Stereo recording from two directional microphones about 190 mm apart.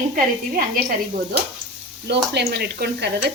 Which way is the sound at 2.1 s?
60° right (ahead or behind).